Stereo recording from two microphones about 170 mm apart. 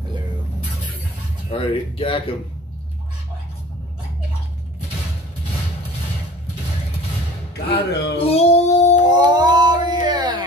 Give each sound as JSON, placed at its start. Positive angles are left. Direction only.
{"t": 1.5, "sound": "speech", "side_deg": 30}
{"t": 7.7, "sound": "speech", "side_deg": 35}
{"t": 9.1, "sound": "a sound", "side_deg": -25}